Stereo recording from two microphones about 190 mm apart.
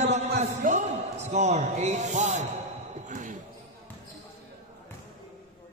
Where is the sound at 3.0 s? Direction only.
40° right (ahead or behind).